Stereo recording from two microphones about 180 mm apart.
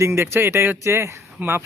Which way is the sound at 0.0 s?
15° right (ahead or behind).